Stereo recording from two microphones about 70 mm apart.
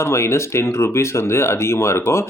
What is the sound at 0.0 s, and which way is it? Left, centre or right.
Speech, left.